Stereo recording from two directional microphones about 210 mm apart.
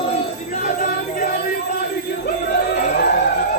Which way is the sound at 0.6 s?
40° left (ahead or behind).